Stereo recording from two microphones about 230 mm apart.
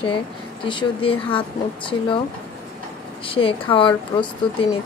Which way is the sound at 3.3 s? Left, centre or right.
Left.